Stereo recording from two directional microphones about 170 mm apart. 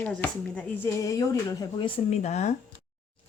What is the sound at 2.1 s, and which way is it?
Speech, 40° left (ahead or behind).